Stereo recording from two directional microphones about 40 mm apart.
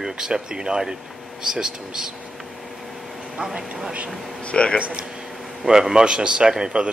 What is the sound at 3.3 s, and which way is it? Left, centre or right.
Speech, centre.